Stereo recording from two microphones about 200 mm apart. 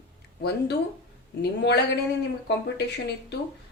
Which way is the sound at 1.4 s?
55° left (ahead or behind).